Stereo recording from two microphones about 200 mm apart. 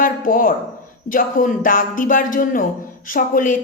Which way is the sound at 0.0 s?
45° left (ahead or behind).